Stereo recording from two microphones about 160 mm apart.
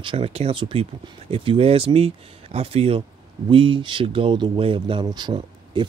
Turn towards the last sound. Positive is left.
turn(degrees=-30)  # may be behind; listen again after turning